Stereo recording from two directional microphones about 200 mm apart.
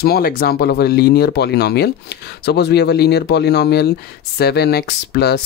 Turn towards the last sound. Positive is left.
turn(degrees=55)  # may be behind; listen again after turning